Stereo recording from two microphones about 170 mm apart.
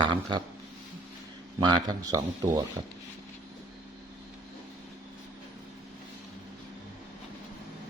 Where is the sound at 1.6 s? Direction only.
25° right (ahead or behind).